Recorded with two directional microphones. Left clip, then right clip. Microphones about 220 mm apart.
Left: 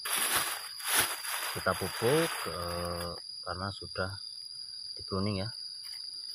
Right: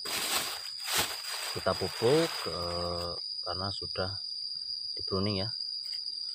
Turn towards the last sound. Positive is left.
turn(degrees=-15)  # may be behind; listen again after turning